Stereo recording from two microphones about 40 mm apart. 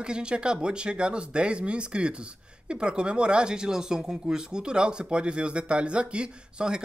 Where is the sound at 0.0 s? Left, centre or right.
Right.